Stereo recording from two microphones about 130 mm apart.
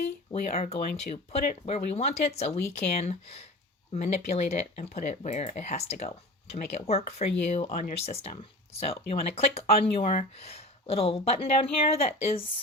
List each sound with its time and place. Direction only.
0.5 s speech: 55° left (ahead or behind)
7.7 s speech: 75° left (ahead or behind)
7.9 s speech: 50° left (ahead or behind)